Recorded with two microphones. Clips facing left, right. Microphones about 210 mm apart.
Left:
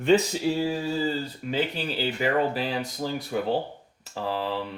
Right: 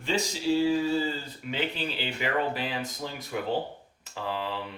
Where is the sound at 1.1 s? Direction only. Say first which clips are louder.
Left 5 dB; 40° left (ahead or behind).